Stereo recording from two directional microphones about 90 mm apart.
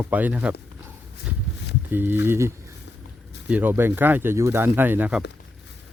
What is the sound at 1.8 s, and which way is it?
Speech, 25° right (ahead or behind).